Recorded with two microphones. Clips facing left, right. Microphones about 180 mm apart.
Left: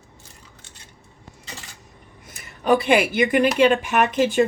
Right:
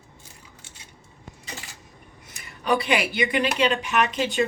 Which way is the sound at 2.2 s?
50° left (ahead or behind).